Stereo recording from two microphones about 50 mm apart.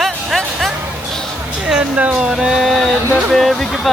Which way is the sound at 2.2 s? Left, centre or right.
Centre.